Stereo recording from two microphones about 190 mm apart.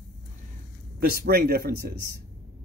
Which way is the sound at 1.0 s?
55° right (ahead or behind).